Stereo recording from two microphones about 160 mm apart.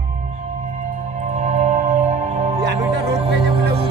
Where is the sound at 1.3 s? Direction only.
45° right (ahead or behind).